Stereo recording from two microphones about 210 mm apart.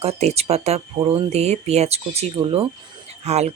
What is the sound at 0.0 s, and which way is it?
Speech, 30° right (ahead or behind).